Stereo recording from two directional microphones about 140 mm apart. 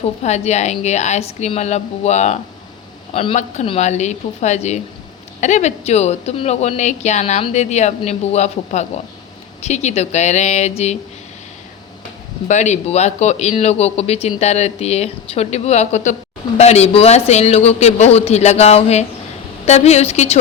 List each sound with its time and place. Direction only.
0.0 s speech: 50° left (ahead or behind)
3.1 s a man's voice: 40° left (ahead or behind)
3.7 s a woman's voice: 55° left (ahead or behind)
12.5 s speech: 55° left (ahead or behind)